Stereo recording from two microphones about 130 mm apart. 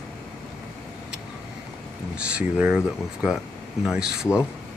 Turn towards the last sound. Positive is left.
turn(degrees=-5)  # may be behind; listen again after turning